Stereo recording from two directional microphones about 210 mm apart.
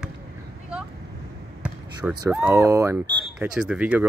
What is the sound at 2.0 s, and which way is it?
Speech, 5° right (ahead or behind).